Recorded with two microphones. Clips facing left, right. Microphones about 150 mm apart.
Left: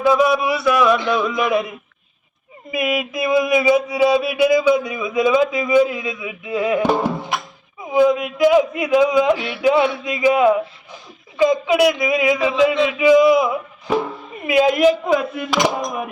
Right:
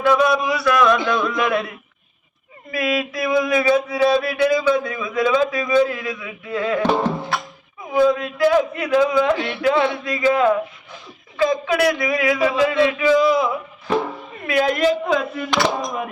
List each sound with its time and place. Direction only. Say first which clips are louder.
0.0 s mantra: left 1 dB; 10° left (ahead or behind)
2.7 s mantra: left 1 dB; 15° left (ahead or behind)
13.0 s a sound: left 7 dB; 15° left (ahead or behind)
14.4 s mantra: left 4 dB; 15° left (ahead or behind)